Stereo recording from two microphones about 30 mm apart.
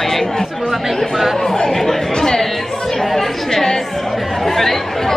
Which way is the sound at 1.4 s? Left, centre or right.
Centre.